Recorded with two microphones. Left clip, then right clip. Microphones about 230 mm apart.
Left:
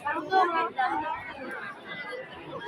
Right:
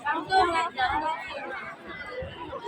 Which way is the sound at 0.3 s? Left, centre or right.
Right.